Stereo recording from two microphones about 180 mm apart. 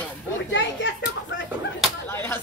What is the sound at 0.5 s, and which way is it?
Speech, 80° left.